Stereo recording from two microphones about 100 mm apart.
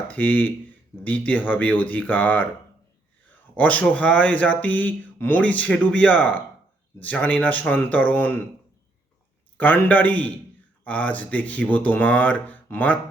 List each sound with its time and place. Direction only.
0.1 s speech: 20° left (ahead or behind)
3.5 s speech: 15° left (ahead or behind)
9.6 s speech: 20° left (ahead or behind)